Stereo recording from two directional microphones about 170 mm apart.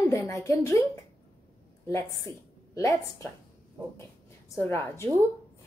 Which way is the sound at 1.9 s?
20° left (ahead or behind).